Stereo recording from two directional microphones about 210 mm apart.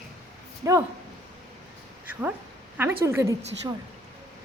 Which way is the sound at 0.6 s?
15° right (ahead or behind).